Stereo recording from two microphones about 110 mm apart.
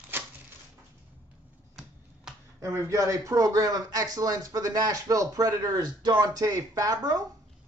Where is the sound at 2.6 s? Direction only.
25° right (ahead or behind).